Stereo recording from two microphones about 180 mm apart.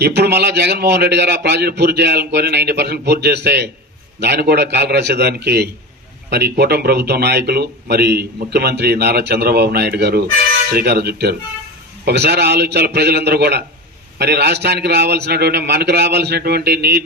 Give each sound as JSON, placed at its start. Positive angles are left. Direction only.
{"t": 0.0, "sound": "speech", "side_deg": -65}